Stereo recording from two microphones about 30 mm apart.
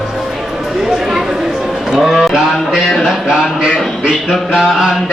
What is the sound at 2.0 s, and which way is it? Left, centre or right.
Speech, centre.